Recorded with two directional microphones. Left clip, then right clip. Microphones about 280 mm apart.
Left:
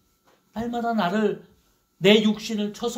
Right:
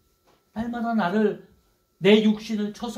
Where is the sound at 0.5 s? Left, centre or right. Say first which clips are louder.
Left 2 dB; left.